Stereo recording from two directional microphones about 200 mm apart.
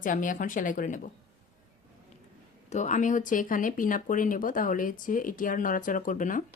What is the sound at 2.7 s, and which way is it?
Speech, 35° left (ahead or behind).